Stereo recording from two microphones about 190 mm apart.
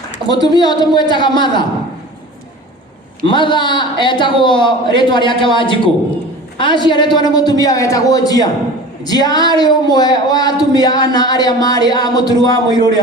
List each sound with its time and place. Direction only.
0.3 s speech: 20° left (ahead or behind)
3.2 s speech: 25° left (ahead or behind)